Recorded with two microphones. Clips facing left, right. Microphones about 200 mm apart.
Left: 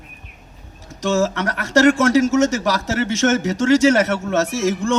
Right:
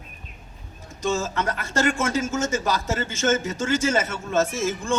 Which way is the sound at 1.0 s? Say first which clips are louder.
Left 6 dB; 75° left (ahead or behind).